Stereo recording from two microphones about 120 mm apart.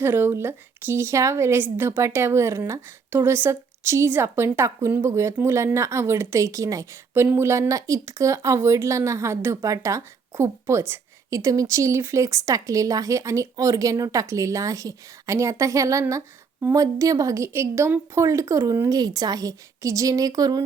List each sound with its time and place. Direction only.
0.0 s a woman's voice: 20° right (ahead or behind)